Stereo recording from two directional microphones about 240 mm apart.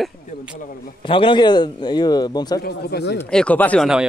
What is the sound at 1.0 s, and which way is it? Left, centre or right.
A man's voice, left.